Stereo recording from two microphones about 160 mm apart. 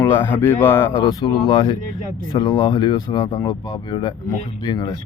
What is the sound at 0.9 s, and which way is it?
Speech, 30° left (ahead or behind).